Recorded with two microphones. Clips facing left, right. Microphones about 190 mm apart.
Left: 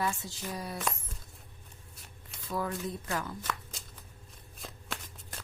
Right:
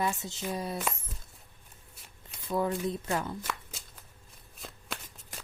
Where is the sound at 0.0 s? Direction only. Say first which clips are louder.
Right 2 dB; 20° right (ahead or behind).